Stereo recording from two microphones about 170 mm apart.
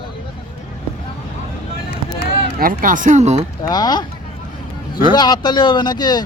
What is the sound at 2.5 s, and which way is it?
Speech, 55° right (ahead or behind).